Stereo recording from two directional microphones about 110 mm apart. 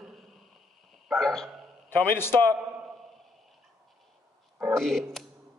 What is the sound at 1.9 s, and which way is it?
Speech, 20° left (ahead or behind).